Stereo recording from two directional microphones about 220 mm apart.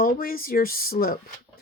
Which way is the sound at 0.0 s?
40° left (ahead or behind).